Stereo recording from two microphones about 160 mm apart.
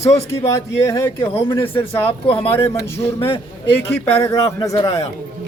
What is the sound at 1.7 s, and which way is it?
Speech, 35° left (ahead or behind).